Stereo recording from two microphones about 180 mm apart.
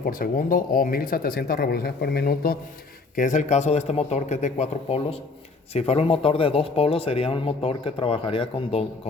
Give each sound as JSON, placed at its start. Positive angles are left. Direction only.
{"t": 0.0, "sound": "speech", "side_deg": 55}
{"t": 3.2, "sound": "speech", "side_deg": 45}